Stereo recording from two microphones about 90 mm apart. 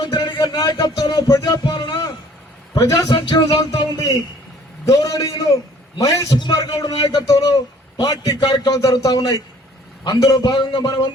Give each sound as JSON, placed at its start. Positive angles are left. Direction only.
{"t": 0.0, "sound": "music", "side_deg": 50}
{"t": 2.8, "sound": "speech", "side_deg": 40}
{"t": 6.3, "sound": "a man's voice", "side_deg": 50}